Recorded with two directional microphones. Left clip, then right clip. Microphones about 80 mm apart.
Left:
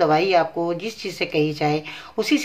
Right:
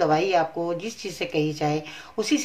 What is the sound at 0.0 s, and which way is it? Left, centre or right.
A woman's voice, left.